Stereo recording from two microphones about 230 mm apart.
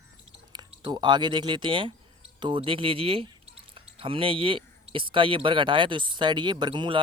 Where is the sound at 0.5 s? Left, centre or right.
Centre.